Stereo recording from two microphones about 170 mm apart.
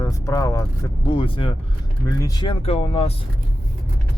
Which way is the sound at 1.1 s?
30° left (ahead or behind).